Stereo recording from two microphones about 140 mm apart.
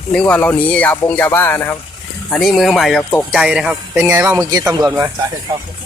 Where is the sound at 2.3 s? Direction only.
Centre (ahead or behind).